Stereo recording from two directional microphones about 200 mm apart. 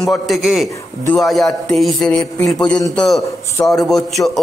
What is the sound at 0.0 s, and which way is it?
A man's voice, centre (ahead or behind).